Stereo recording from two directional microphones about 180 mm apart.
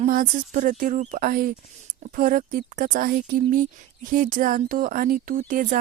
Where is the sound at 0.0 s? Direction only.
45° right (ahead or behind).